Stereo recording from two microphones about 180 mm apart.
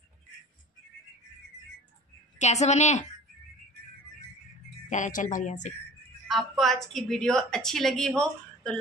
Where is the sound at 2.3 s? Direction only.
40° left (ahead or behind).